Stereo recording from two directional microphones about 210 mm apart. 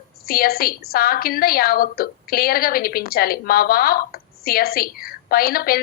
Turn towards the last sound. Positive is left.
turn(degrees=45)  # may be behind; listen again after turning